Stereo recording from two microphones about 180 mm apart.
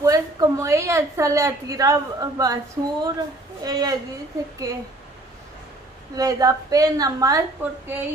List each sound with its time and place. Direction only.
0.0 s a woman's voice: 20° right (ahead or behind)
6.1 s a woman's voice: 20° right (ahead or behind)